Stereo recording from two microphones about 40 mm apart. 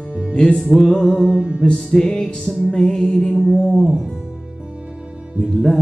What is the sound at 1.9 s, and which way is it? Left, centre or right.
Music, centre.